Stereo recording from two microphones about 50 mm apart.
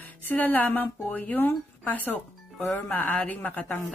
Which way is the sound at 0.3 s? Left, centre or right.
Left.